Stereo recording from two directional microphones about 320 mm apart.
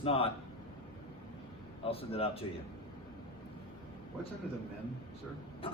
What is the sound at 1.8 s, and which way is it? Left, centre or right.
Speech, centre.